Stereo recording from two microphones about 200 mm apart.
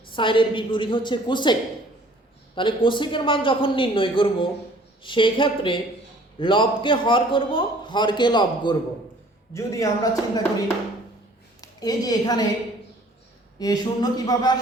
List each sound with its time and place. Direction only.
0.2 s a man's voice: 25° left (ahead or behind)
2.6 s a man's voice: 25° left (ahead or behind)
11.6 s a woman's voice: 20° left (ahead or behind)
13.6 s a man's voice: 20° left (ahead or behind)